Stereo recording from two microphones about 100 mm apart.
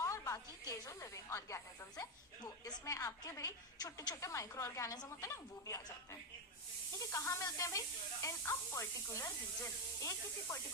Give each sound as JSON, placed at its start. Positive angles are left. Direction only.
{"t": 0.0, "sound": "a woman's voice", "side_deg": 30}